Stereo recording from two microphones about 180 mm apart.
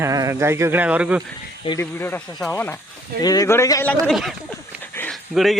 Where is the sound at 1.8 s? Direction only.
10° left (ahead or behind).